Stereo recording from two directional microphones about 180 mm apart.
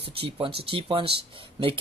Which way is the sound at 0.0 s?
30° right (ahead or behind).